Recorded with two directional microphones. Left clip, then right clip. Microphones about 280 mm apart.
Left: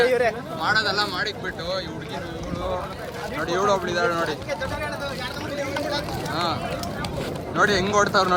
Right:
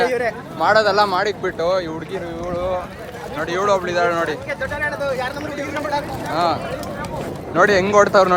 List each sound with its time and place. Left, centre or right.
0.1 s a sound: right
0.6 s speech: centre
3.3 s speech: centre
6.3 s speech: centre